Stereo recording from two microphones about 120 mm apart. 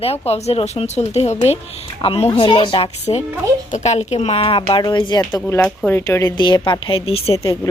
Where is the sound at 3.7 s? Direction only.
75° left (ahead or behind); by 5.2 s 40° left (ahead or behind).